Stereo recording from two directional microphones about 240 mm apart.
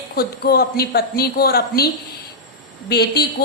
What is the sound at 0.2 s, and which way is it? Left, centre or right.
A woman's voice, left.